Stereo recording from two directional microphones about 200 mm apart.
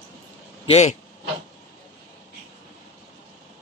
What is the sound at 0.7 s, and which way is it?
Speech, 35° left (ahead or behind).